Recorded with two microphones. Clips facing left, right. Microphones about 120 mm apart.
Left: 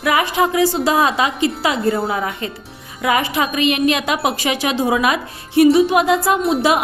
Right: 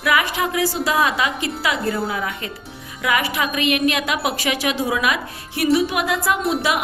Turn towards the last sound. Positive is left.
turn(degrees=0)  # may be behind; listen again after turning